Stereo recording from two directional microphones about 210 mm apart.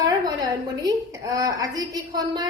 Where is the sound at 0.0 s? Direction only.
15° right (ahead or behind).